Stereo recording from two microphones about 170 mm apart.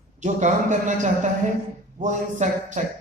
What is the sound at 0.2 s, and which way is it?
Speech, 45° right (ahead or behind).